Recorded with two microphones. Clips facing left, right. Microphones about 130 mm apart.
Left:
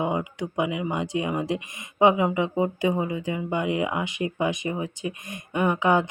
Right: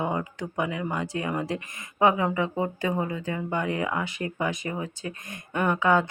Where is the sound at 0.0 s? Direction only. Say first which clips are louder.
Left 2 dB; 15° left (ahead or behind).